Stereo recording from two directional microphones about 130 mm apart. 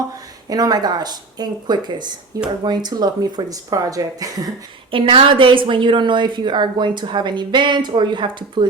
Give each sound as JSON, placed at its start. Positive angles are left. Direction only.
{"t": 0.4, "sound": "a woman's voice", "side_deg": -30}
{"t": 4.9, "sound": "a woman's voice", "side_deg": -40}